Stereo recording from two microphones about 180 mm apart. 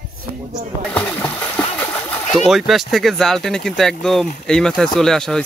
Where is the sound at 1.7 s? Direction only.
10° left (ahead or behind).